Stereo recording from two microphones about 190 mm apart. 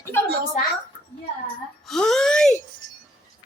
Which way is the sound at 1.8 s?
Centre (ahead or behind).